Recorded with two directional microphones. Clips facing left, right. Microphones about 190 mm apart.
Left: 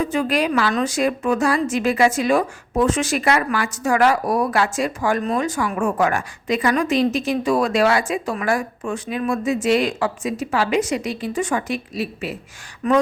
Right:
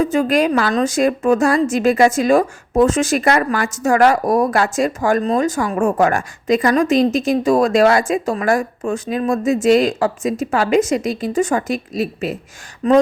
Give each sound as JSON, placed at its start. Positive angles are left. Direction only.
{"t": 0.0, "sound": "a woman's voice", "side_deg": -45}
{"t": 12.8, "sound": "speech", "side_deg": -35}